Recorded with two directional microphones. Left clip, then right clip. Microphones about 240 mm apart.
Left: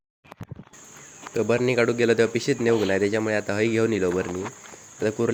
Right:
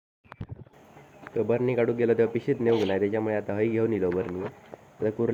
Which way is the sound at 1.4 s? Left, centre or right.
Centre.